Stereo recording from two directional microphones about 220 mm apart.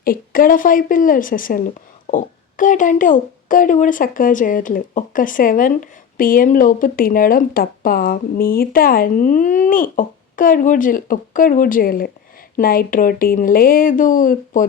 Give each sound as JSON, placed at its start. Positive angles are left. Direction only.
{"t": 0.0, "sound": "a woman's voice", "side_deg": 40}